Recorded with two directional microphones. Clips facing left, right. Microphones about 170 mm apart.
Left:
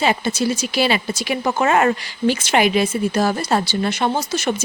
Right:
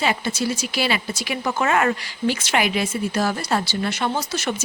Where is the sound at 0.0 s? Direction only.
25° left (ahead or behind).